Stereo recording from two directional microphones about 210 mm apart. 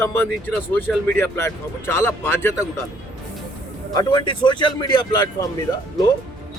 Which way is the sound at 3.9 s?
20° left (ahead or behind).